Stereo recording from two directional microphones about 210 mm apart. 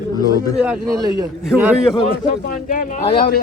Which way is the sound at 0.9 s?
15° right (ahead or behind).